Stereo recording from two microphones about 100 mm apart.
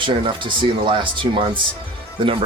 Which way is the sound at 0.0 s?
55° right (ahead or behind).